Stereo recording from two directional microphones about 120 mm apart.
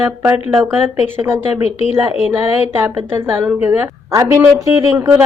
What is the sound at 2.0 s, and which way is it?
A woman's voice, 20° right (ahead or behind).